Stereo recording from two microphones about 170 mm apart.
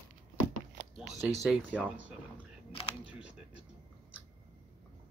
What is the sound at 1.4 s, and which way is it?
Speech, 5° right (ahead or behind).